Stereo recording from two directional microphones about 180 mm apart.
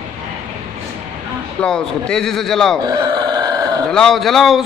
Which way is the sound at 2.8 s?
25° right (ahead or behind).